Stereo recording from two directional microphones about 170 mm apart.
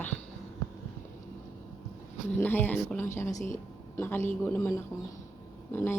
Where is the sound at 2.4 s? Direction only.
10° left (ahead or behind).